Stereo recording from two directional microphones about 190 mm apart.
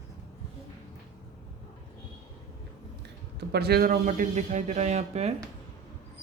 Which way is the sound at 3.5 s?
60° right (ahead or behind).